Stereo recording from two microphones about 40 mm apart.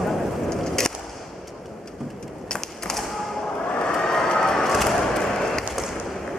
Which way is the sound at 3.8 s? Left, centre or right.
Centre.